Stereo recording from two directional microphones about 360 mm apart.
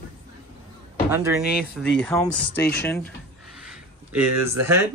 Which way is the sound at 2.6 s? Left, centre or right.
Left.